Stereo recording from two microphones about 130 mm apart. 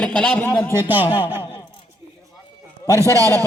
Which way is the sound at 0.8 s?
15° right (ahead or behind).